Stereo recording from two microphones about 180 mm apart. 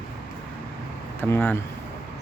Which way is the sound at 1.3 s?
10° left (ahead or behind).